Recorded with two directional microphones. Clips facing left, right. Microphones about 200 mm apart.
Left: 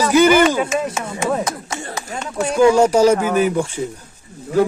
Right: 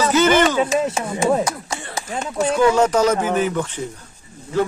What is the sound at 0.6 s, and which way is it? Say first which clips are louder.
Speech: right 1 dB; 25° right (ahead or behind).